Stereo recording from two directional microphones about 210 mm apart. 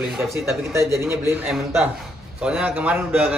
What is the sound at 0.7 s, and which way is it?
A man's voice, 15° right (ahead or behind).